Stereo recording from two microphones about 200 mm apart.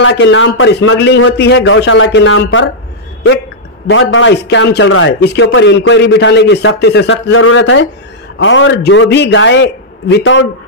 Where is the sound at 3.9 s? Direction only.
75° left (ahead or behind).